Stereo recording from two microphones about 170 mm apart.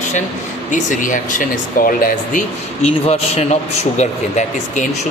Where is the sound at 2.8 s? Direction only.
40° left (ahead or behind).